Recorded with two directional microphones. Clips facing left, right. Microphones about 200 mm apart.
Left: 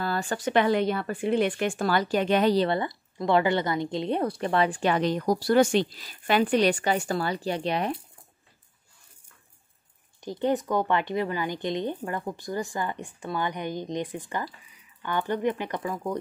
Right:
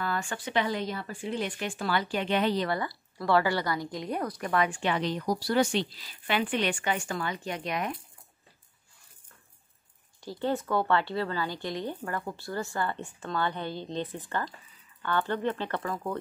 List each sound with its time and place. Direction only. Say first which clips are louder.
0.0 s a sound: left 4 dB; 35° left (ahead or behind)
0.5 s speech: left 7 dB; 60° left (ahead or behind); by 8.0 s 30° left (ahead or behind)
10.2 s speech: left 4 dB; 20° left (ahead or behind)